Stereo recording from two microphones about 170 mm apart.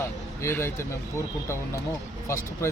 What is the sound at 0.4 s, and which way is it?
Speech, 15° left (ahead or behind).